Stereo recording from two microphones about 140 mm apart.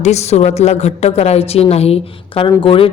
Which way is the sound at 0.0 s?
50° left (ahead or behind).